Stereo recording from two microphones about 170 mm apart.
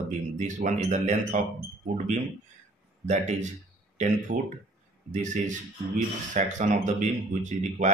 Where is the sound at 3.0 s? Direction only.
45° right (ahead or behind).